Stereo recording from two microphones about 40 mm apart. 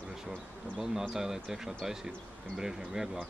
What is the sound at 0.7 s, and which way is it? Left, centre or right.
Speech, centre.